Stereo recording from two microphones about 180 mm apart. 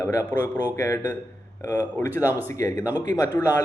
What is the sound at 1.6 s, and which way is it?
A man's voice, 20° left (ahead or behind).